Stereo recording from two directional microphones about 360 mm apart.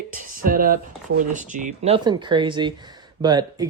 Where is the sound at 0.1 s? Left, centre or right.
Right.